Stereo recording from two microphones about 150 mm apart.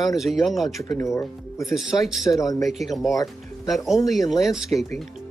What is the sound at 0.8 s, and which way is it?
Speech, 20° left (ahead or behind).